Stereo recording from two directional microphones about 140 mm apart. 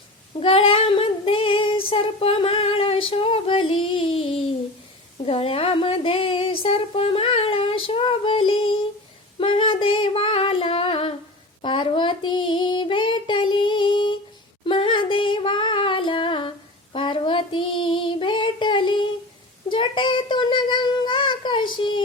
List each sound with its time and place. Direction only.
0.3 s child singing: 40° left (ahead or behind)
5.2 s a sound: 45° left (ahead or behind)
9.4 s female singing: 40° left (ahead or behind)
11.6 s child singing: 35° left (ahead or behind)
14.6 s singing: 40° left (ahead or behind)
16.9 s child singing: 40° left (ahead or behind)
19.7 s a sound: 35° left (ahead or behind)